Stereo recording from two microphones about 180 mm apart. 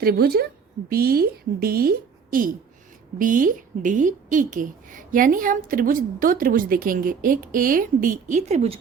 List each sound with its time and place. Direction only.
0.0 s a woman's voice: 60° right (ahead or behind); by 8.8 s 35° right (ahead or behind)